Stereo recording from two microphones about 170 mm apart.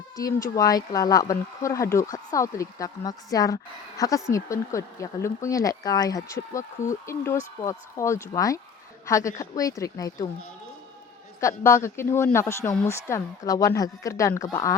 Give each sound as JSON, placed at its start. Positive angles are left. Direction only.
{"t": 0.2, "sound": "speech", "side_deg": 20}
{"t": 11.3, "sound": "speech", "side_deg": 15}